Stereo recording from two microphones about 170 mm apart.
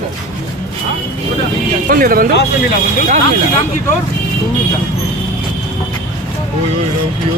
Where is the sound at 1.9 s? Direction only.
55° right (ahead or behind).